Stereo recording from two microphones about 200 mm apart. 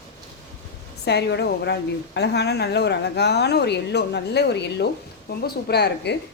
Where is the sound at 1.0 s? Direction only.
55° left (ahead or behind).